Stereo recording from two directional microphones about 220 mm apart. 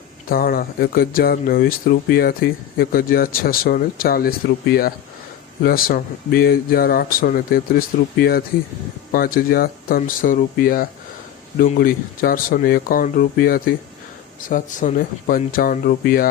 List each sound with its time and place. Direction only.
0.3 s speech: 40° left (ahead or behind)